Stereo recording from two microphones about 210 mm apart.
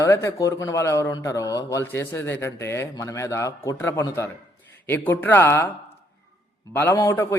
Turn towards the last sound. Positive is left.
turn(degrees=10)  # may be behind; listen again after turning